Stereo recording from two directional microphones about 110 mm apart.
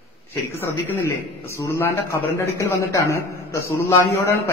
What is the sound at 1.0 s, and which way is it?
A man's voice, 25° left (ahead or behind).